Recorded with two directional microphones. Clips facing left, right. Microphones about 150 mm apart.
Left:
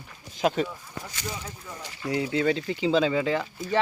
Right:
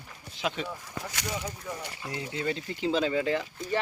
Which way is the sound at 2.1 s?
90° left.